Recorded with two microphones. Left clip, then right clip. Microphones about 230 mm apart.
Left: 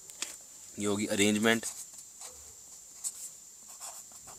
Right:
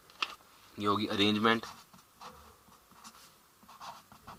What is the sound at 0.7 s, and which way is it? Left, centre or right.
Speech, left.